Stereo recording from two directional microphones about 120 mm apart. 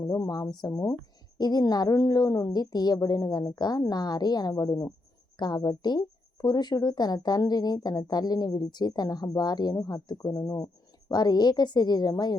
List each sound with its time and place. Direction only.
0.0 s speech: 30° left (ahead or behind)